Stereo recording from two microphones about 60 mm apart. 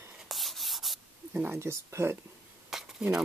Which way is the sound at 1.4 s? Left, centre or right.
Right.